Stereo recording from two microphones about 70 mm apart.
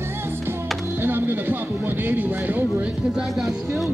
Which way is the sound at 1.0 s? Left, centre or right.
Right.